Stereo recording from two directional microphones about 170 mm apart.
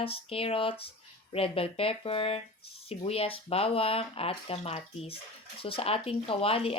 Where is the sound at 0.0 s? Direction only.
35° left (ahead or behind).